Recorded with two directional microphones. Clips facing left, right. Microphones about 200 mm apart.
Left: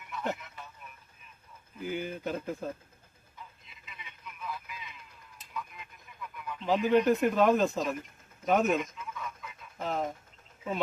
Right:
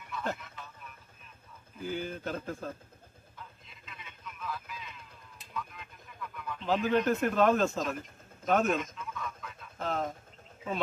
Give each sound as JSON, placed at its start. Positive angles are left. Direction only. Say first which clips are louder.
{"t": 0.1, "sound": "music", "louder": "left 1 dB", "side_deg": 15}
{"t": 1.8, "sound": "speech", "louder": "left 1 dB", "side_deg": 15}
{"t": 4.4, "sound": "a sound", "louder": "right 1 dB", "side_deg": 10}
{"t": 6.5, "sound": "speech", "louder": "left 3 dB", "side_deg": 10}
{"t": 8.4, "sound": "chicken", "louder": "left 1 dB", "side_deg": 15}